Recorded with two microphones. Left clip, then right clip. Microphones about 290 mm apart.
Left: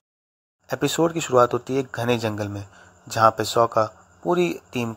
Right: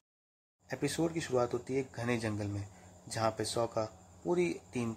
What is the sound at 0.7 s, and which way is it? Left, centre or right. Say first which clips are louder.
Speech: left 13 dB; centre.